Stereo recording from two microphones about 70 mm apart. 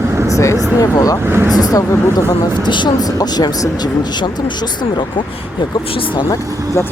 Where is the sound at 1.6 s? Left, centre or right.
Left.